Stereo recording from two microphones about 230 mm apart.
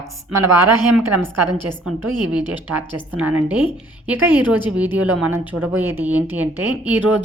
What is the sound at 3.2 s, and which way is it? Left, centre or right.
A woman's voice, centre.